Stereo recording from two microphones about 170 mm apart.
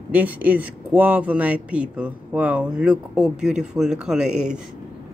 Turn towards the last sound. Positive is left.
turn(degrees=-5)  # may be behind; listen again after turning